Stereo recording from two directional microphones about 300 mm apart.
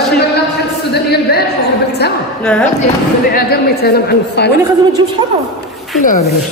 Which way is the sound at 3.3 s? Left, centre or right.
Left.